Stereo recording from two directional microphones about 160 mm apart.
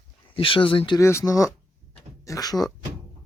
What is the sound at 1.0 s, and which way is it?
Speech, 15° left (ahead or behind).